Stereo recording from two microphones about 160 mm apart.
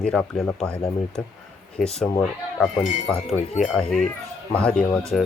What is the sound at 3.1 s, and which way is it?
Speech, 40° left (ahead or behind).